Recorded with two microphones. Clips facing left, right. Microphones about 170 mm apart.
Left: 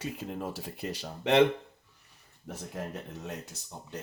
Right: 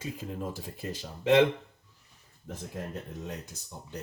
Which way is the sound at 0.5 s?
70° left (ahead or behind).